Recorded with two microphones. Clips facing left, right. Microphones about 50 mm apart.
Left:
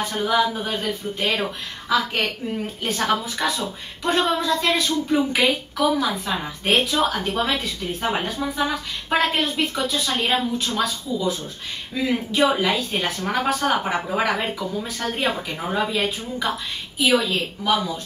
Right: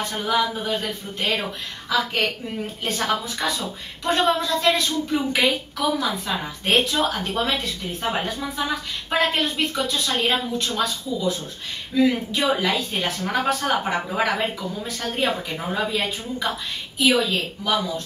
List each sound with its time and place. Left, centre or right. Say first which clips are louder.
0.1 s a woman's voice: left 2 dB; centre